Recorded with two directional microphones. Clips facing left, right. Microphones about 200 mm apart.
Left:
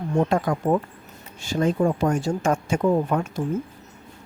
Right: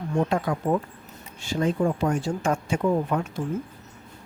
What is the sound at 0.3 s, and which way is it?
Speech, 45° left (ahead or behind).